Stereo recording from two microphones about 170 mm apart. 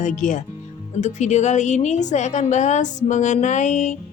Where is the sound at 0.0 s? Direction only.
45° left (ahead or behind).